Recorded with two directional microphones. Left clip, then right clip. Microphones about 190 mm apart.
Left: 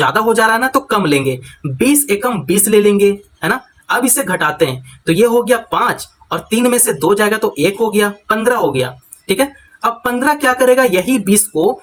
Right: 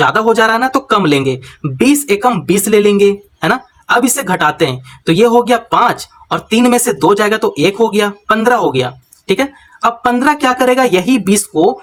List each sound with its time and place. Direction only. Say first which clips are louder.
0.1 s speech: right 2 dB; 20° right (ahead or behind)